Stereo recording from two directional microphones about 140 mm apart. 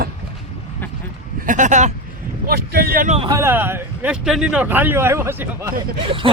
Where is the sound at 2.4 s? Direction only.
90° right.